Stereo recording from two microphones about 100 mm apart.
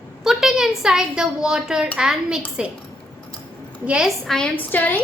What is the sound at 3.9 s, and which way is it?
Speech, 10° right (ahead or behind).